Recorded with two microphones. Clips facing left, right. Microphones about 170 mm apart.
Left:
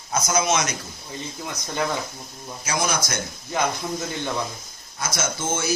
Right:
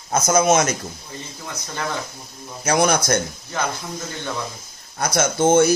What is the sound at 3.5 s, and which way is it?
Speech, 15° left (ahead or behind).